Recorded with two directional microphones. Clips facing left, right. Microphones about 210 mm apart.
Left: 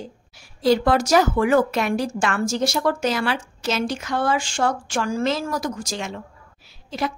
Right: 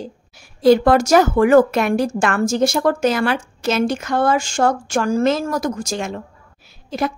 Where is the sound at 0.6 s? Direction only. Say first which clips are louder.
Right 6 dB; 50° right (ahead or behind).